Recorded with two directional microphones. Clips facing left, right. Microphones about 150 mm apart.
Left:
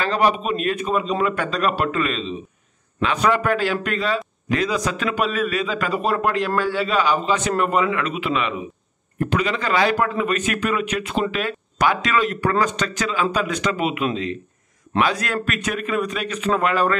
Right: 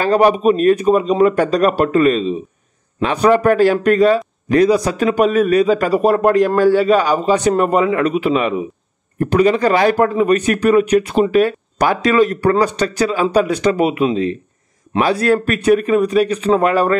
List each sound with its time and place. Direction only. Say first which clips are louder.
0.0 s a man's voice: right 8 dB; 45° right (ahead or behind)